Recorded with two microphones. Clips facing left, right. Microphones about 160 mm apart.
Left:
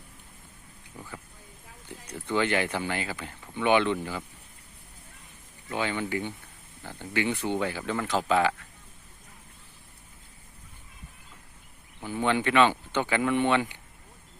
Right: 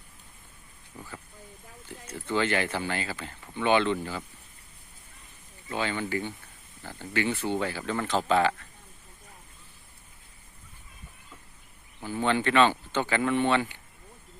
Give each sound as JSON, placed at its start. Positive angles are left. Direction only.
{"t": 1.9, "sound": "speech", "side_deg": 15}
{"t": 5.6, "sound": "speech", "side_deg": 15}
{"t": 12.1, "sound": "speech", "side_deg": 15}